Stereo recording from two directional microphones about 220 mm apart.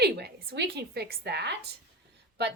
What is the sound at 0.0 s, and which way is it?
A woman's voice, 45° right (ahead or behind).